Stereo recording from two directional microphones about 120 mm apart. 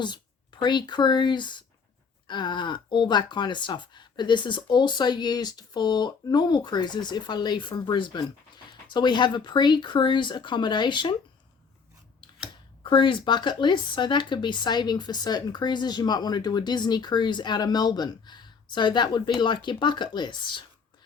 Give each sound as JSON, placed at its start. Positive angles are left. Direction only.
{"t": 0.6, "sound": "speech", "side_deg": 40}
{"t": 12.8, "sound": "speech", "side_deg": 45}